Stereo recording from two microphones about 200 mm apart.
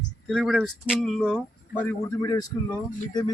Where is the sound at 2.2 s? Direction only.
20° left (ahead or behind).